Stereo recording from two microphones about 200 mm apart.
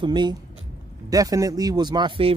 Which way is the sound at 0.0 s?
20° right (ahead or behind).